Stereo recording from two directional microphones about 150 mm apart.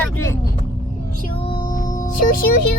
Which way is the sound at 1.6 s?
60° left (ahead or behind).